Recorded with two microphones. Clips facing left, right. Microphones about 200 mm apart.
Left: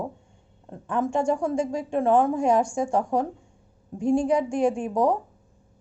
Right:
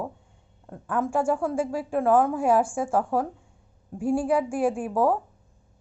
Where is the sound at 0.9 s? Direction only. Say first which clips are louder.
Left 1 dB; 5° right (ahead or behind).